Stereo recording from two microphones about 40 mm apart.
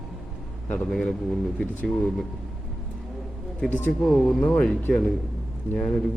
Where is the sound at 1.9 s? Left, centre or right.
Centre.